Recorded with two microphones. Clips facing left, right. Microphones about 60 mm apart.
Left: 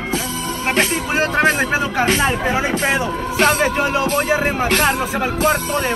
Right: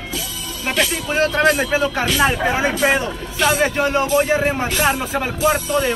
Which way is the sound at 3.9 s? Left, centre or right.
Left.